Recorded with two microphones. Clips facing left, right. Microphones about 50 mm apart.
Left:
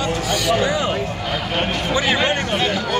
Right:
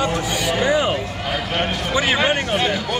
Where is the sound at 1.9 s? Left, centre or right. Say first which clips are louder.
Right 1 dB; centre.